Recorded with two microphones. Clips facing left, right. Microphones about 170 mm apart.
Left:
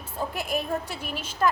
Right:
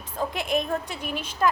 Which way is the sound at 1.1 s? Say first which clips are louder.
Right 3 dB; 55° right (ahead or behind).